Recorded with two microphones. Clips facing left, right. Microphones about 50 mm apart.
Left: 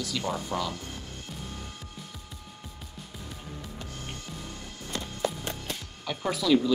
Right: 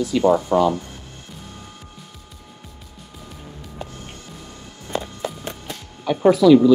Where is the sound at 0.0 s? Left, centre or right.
Right.